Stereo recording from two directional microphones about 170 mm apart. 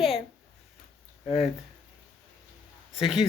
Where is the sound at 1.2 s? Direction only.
35° left (ahead or behind).